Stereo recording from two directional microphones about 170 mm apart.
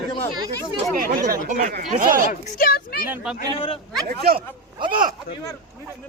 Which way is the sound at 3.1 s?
5° right (ahead or behind).